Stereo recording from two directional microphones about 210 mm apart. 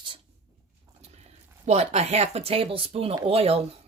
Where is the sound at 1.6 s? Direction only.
30° right (ahead or behind).